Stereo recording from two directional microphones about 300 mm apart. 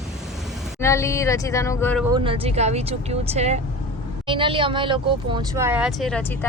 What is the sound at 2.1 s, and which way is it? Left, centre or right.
Speech, centre.